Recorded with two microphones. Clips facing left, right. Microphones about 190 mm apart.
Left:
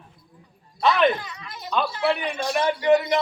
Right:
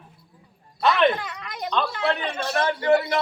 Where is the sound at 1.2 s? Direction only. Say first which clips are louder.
Right 6 dB; 70° right (ahead or behind).